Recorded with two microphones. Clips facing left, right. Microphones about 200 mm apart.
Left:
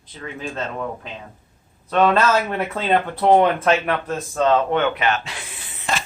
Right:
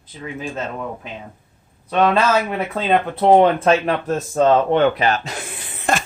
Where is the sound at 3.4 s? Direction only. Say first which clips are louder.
Right 3 dB; 30° right (ahead or behind); by 6.0 s 50° right (ahead or behind).